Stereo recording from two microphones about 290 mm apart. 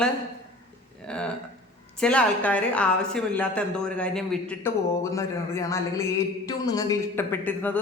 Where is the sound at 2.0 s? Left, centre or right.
Centre.